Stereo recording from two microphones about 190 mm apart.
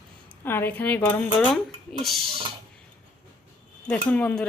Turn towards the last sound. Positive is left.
turn(degrees=5)  # may be behind; listen again after turning